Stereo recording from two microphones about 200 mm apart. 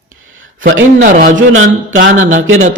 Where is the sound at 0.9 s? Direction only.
40° right (ahead or behind).